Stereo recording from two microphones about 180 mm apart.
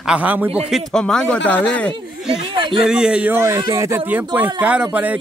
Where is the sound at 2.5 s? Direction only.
25° right (ahead or behind).